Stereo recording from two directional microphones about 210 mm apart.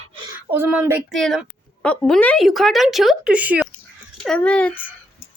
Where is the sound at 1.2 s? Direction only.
Centre (ahead or behind).